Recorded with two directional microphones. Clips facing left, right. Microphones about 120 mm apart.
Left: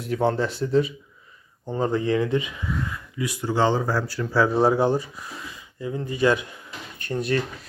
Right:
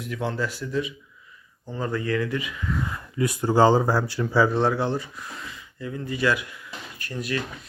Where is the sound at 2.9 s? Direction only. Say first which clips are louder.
Right 4 dB; 45° right (ahead or behind); by 4.4 s 20° right (ahead or behind).